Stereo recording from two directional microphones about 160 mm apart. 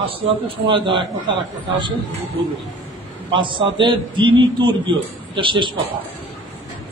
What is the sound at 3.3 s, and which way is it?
A man's voice, 30° right (ahead or behind).